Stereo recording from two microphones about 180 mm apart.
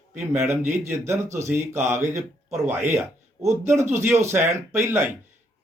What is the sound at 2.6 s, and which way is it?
Speech, 10° right (ahead or behind).